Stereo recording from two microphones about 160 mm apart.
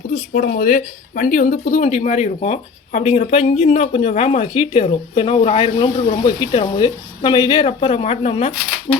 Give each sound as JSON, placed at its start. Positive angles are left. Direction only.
{"t": 0.1, "sound": "speech", "side_deg": 60}